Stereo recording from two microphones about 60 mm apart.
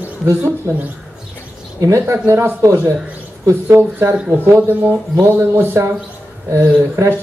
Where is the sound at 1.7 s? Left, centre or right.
Right.